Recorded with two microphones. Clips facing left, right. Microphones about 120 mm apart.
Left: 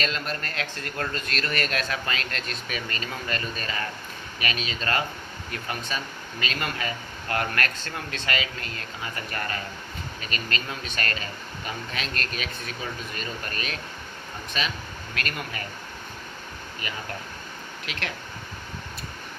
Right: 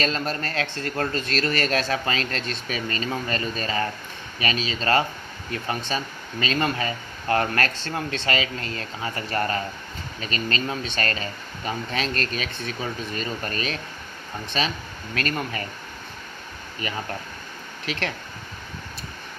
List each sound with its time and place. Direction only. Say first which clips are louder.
0.0 s speech: right 4 dB; 35° right (ahead or behind)
16.8 s speech: right 5 dB; 40° right (ahead or behind)